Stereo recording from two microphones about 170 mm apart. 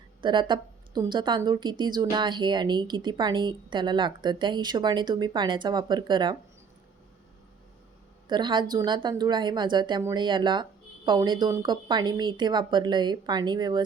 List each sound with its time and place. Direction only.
0.2 s a woman's voice: 25° right (ahead or behind)
8.3 s speech: 25° right (ahead or behind)